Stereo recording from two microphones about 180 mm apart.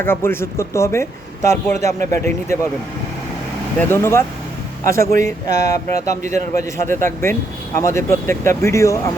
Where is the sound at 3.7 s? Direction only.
15° left (ahead or behind).